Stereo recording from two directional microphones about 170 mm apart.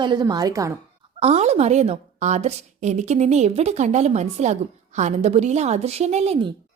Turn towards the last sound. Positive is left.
turn(degrees=-35)  # may be behind; listen again after turning